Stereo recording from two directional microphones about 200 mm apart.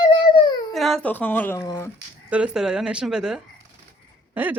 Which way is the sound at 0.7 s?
Centre (ahead or behind).